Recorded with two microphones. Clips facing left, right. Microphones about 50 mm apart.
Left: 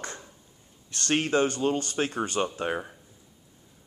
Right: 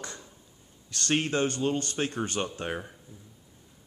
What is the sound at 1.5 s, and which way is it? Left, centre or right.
Speech, left.